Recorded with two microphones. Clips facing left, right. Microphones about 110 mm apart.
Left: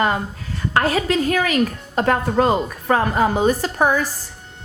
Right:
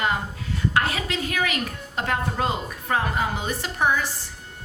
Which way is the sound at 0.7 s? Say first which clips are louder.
Left 8 dB; 40° left (ahead or behind).